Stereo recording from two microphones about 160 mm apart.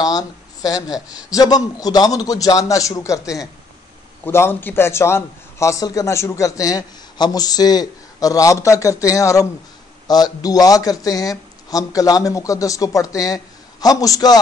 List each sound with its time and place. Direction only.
0.0 s a man's voice: 25° left (ahead or behind)